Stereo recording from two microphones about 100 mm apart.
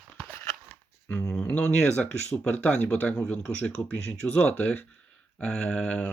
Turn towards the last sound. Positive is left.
turn(degrees=10)  # may be behind; listen again after turning